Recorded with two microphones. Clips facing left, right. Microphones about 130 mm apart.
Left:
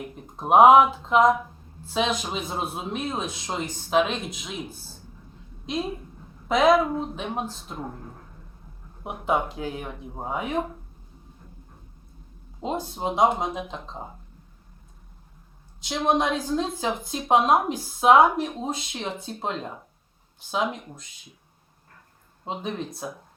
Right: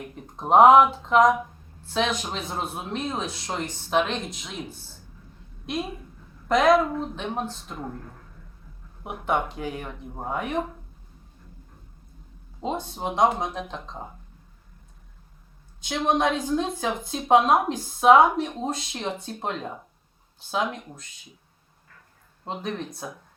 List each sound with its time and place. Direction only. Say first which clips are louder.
0.0 s a woman's voice: left 1 dB; 5° left (ahead or behind)
9.0 s a woman's voice: left 1 dB; 5° left (ahead or behind)
12.6 s a woman's voice: left 1 dB; centre (ahead or behind)
15.8 s a woman's voice: even; 5° left (ahead or behind)
22.4 s a woman's voice: even; 5° left (ahead or behind)